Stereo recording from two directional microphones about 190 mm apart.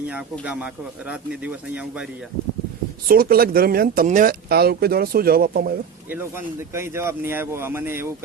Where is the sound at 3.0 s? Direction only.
50° right (ahead or behind).